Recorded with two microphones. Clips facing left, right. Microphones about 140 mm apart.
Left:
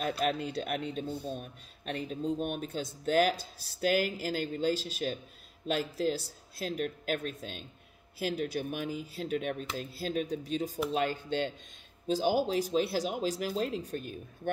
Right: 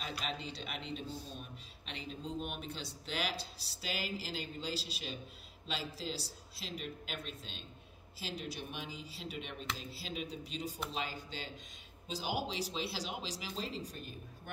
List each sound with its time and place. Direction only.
0.0 s a man's voice: 55° left (ahead or behind)
9.6 s speech: 5° left (ahead or behind)
9.9 s a man's voice: 45° left (ahead or behind)
12.1 s a man's voice: 45° left (ahead or behind)